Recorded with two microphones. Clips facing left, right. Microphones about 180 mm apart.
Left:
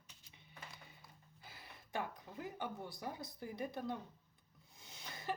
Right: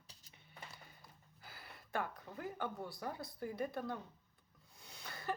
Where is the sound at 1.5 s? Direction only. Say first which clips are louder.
Right 2 dB; 20° left (ahead or behind).